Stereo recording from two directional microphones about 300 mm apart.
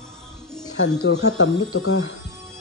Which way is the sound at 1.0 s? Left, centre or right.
Left.